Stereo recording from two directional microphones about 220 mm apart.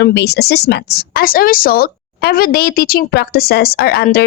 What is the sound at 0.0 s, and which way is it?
A woman's voice, 50° left (ahead or behind).